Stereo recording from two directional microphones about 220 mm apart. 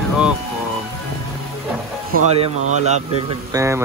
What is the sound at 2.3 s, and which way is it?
Speech, 30° right (ahead or behind).